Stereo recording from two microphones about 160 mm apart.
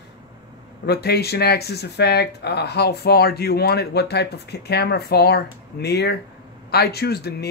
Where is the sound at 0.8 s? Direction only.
85° left.